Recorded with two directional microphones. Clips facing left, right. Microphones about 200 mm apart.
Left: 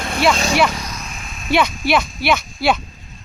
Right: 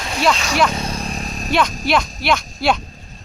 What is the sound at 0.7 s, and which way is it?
Vehicle, 30° right (ahead or behind).